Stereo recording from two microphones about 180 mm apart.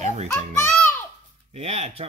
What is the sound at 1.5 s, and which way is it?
Speech, 35° right (ahead or behind).